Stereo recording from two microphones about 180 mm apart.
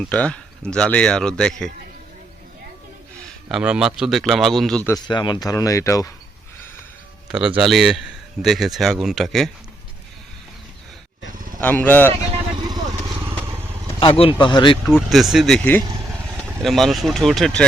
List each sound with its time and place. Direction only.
0.1 s a man's voice: 5° left (ahead or behind)
3.5 s a man's voice: 5° right (ahead or behind)
4.9 s speech: 20° left (ahead or behind)
7.3 s a man's voice: 5° right (ahead or behind)
11.6 s speech: 10° left (ahead or behind)
14.0 s speech: 30° left (ahead or behind)
14.9 s a man's voice: centre (ahead or behind)
15.8 s vehicle: 25° right (ahead or behind)
16.6 s a man's voice: centre (ahead or behind)